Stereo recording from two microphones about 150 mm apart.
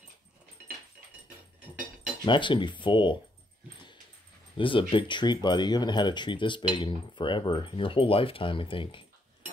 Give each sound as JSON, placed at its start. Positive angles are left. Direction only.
{"t": 2.2, "sound": "speech", "side_deg": 30}
{"t": 4.6, "sound": "speech", "side_deg": 35}